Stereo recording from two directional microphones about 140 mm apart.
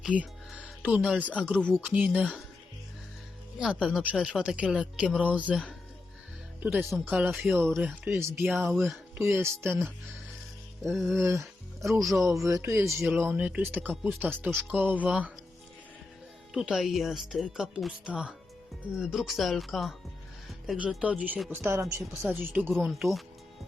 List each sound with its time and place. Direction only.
0.0 s a woman's voice: 10° right (ahead or behind)
3.6 s a woman's voice: 5° right (ahead or behind)
9.1 s a woman's voice: 20° right (ahead or behind)
11.0 s a woman's voice: 15° right (ahead or behind)
16.6 s a woman's voice: 5° right (ahead or behind)
21.5 s a woman's voice: 20° right (ahead or behind)
22.8 s speech: centre (ahead or behind)